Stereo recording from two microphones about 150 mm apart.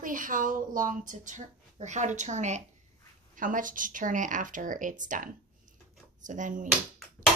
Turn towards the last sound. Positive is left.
turn(degrees=0)  # may be behind; listen again after turning